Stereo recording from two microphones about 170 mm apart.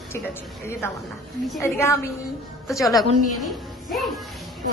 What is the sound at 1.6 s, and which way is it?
Speech, 15° left (ahead or behind).